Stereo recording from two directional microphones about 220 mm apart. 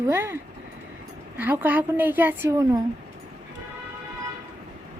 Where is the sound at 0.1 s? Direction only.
10° right (ahead or behind).